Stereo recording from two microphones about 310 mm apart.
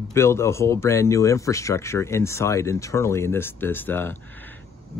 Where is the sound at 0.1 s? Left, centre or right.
Centre.